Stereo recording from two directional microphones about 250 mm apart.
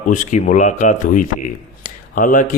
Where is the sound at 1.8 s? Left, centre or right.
Left.